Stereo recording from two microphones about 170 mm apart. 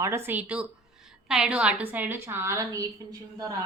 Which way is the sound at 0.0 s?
15° right (ahead or behind).